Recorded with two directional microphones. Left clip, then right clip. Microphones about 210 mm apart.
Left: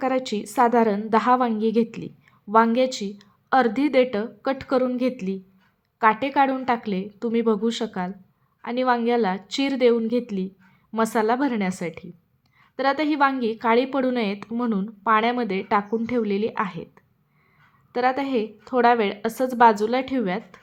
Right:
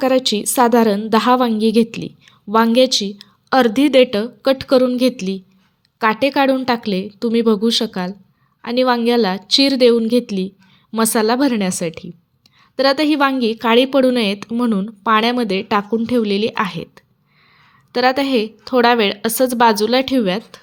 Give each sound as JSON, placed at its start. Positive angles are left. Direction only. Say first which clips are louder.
{"t": 0.0, "sound": "a woman's voice", "louder": "right 9 dB", "side_deg": -20}